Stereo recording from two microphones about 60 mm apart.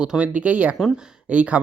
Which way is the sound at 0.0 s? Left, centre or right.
Centre.